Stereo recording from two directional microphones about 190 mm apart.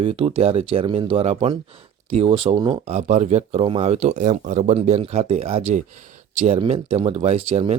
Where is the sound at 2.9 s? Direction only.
40° right (ahead or behind).